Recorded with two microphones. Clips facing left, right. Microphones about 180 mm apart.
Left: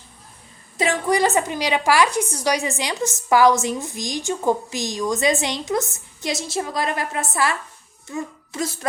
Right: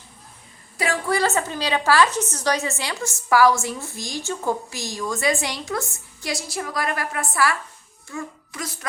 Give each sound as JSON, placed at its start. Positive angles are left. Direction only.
{"t": 0.8, "sound": "a woman's voice", "side_deg": 20}